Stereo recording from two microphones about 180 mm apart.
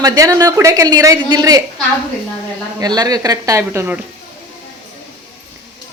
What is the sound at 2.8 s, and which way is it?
A woman's voice, 20° right (ahead or behind).